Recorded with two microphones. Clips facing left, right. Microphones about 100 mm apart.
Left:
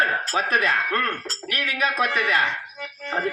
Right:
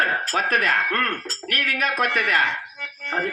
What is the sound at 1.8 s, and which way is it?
Speech, 5° left (ahead or behind).